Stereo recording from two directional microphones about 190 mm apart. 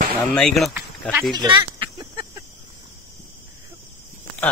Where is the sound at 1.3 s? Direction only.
20° right (ahead or behind).